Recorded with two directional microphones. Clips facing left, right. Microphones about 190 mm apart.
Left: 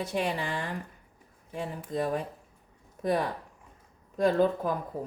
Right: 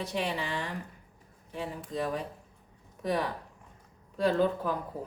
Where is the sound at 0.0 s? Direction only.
50° left (ahead or behind).